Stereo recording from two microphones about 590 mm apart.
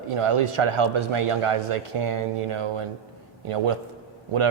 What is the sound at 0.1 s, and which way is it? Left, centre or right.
Speech, right.